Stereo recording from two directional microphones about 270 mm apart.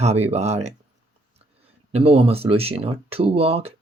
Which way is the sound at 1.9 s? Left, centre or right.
Right.